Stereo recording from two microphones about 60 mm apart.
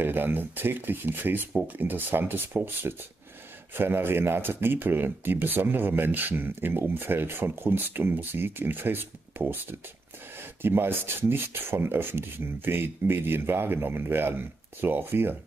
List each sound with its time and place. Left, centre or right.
0.0 s speech: right